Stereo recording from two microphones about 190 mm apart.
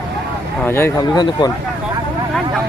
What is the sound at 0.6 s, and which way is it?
Speech, 10° left (ahead or behind).